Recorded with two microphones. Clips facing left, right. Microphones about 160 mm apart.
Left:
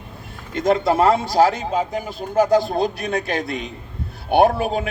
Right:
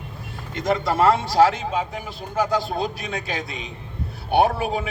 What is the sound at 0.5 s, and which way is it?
Speech, 45° left (ahead or behind).